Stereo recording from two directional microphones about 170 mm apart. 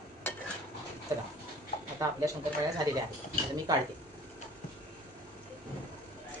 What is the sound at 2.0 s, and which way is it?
Speech, 20° right (ahead or behind).